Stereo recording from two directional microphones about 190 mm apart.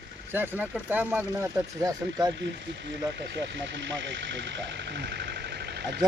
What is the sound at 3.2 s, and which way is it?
Speech, 70° right (ahead or behind).